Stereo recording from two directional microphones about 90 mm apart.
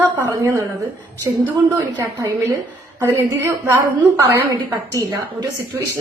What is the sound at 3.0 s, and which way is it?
A woman's voice, 30° right (ahead or behind).